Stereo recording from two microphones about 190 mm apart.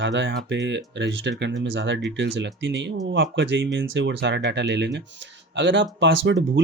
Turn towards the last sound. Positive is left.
turn(degrees=-70)  # may be behind; listen again after turning